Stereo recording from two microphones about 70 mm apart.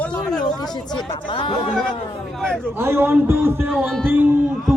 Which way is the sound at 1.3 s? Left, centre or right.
Left.